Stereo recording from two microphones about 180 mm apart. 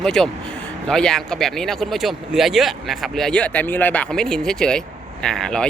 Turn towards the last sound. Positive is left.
turn(degrees=5)  # may be behind; listen again after turning